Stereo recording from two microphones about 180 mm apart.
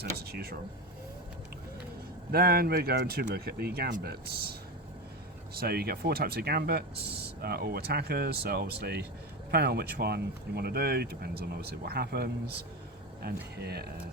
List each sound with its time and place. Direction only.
0.0 s speech: 60° right (ahead or behind)
2.3 s speech: 60° right (ahead or behind)
5.5 s speech: 60° right (ahead or behind)